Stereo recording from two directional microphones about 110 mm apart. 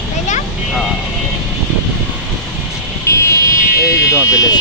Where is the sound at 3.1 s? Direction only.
30° left (ahead or behind).